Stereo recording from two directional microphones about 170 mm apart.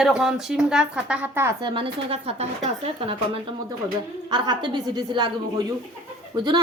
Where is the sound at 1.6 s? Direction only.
30° right (ahead or behind).